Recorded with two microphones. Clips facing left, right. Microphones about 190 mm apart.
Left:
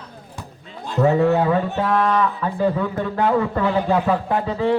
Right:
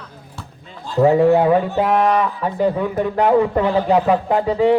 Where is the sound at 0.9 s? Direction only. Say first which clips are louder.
Right 4 dB; 15° right (ahead or behind).